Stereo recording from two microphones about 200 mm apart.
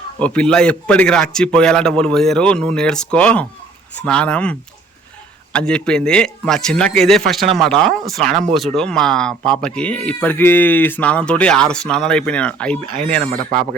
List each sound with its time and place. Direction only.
0.2 s speech: 5° left (ahead or behind)
5.5 s speech: 5° left (ahead or behind)